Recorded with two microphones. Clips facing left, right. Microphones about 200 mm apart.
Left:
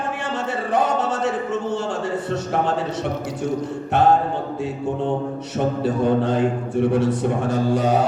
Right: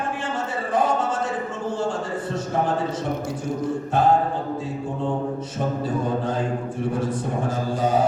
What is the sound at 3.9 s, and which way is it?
Speech, 70° left (ahead or behind).